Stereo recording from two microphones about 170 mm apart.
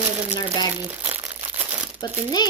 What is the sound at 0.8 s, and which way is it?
Crumpling, 10° right (ahead or behind).